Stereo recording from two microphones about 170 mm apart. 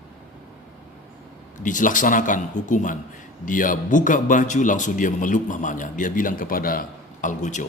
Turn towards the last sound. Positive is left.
turn(degrees=45)  # may be behind; listen again after turning